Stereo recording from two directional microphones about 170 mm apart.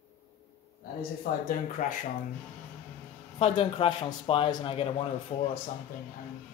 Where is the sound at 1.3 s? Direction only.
60° left (ahead or behind).